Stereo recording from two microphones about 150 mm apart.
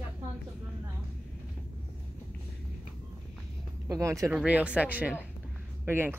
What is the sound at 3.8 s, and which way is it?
Speech, 20° right (ahead or behind).